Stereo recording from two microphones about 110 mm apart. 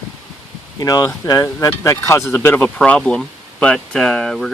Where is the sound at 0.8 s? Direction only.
35° left (ahead or behind).